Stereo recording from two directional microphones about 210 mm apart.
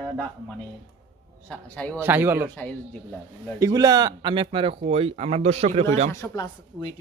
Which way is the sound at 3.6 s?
15° right (ahead or behind).